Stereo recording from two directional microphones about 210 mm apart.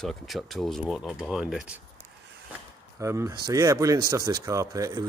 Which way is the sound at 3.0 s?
15° right (ahead or behind).